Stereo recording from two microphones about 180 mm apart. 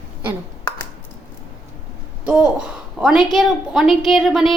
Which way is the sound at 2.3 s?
5° right (ahead or behind).